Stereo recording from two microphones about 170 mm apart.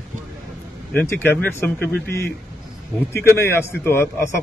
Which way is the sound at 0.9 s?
10° left (ahead or behind).